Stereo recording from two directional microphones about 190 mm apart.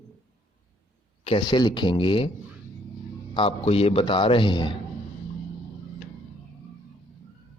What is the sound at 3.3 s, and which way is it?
A man's voice, 30° left (ahead or behind).